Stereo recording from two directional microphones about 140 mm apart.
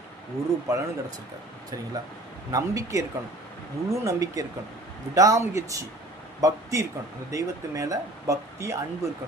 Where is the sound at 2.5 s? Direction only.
25° right (ahead or behind).